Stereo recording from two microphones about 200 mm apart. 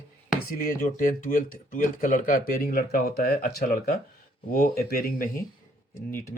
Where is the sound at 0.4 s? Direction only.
45° left (ahead or behind).